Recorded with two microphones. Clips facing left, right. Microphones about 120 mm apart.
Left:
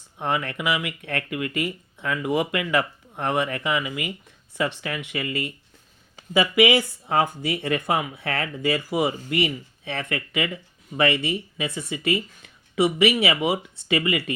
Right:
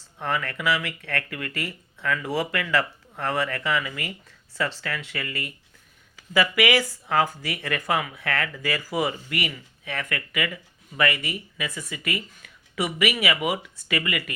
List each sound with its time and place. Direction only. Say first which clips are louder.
0.2 s speech: left 2 dB; 20° left (ahead or behind)